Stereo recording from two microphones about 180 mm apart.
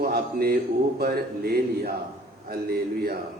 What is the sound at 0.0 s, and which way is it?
Speech, 60° right (ahead or behind).